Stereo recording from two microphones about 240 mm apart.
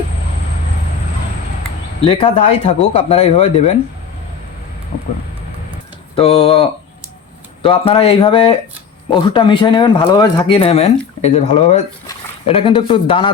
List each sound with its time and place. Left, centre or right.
2.0 s speech: left
6.4 s speech: left